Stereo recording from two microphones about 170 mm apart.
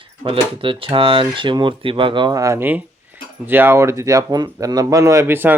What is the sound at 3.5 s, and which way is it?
Speech, 10° right (ahead or behind).